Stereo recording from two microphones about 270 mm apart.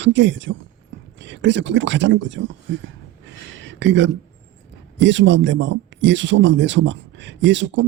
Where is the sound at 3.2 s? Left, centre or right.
Right.